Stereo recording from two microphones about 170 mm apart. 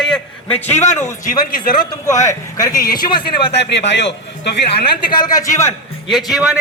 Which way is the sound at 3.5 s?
90° left.